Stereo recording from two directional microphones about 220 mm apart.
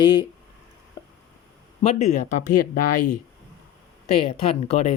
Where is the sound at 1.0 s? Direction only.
20° left (ahead or behind).